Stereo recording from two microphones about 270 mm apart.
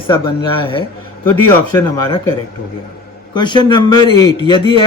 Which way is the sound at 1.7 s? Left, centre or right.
Centre.